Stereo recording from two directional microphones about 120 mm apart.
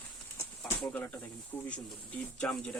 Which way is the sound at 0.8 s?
10° left (ahead or behind).